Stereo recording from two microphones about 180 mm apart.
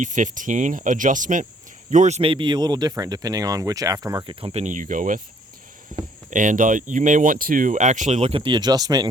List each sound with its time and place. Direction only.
0.0 s speech: 45° right (ahead or behind); by 9.0 s 20° right (ahead or behind)